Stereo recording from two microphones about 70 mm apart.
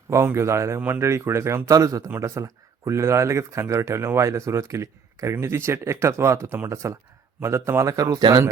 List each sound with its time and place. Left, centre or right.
0.1 s speech: right
1.7 s speech: right